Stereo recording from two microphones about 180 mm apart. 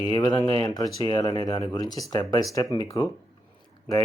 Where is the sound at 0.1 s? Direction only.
25° left (ahead or behind).